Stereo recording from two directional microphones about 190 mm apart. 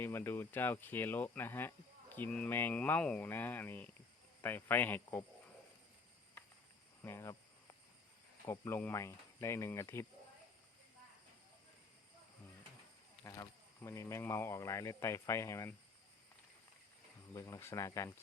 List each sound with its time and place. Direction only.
0.0 s speech: 10° left (ahead or behind)
7.0 s cricket: 15° left (ahead or behind)
8.4 s speech: 10° left (ahead or behind)
13.2 s speech: 15° left (ahead or behind)
17.3 s speech: 15° left (ahead or behind)